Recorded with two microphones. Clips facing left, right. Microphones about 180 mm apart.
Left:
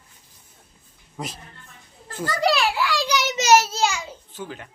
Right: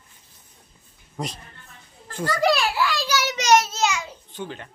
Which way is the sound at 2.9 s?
15° left (ahead or behind).